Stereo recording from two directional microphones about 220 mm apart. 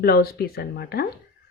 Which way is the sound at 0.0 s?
45° left (ahead or behind).